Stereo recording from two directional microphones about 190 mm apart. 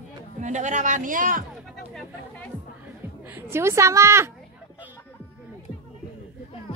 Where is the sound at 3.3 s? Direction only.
15° right (ahead or behind).